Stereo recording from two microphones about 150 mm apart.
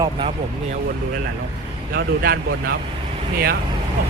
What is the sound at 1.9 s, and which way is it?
Speech, 90° right.